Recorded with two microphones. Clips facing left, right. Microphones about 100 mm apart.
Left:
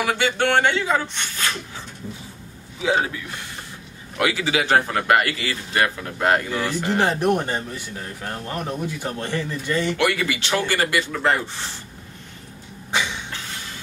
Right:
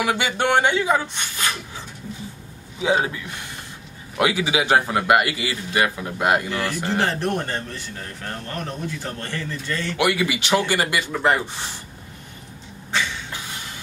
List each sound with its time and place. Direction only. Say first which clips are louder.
0.0 s a man's voice: left 1 dB; 15° right (ahead or behind)
2.8 s a man's voice: right 1 dB; 20° right (ahead or behind)
4.2 s a man's voice: right 1 dB; 15° right (ahead or behind)
6.5 s speech: left 1 dB; 15° left (ahead or behind)
9.9 s a man's voice: right 1 dB; 15° right (ahead or behind)
12.9 s vehicle: left 1 dB; 15° left (ahead or behind)
13.3 s a sound: even; 15° right (ahead or behind)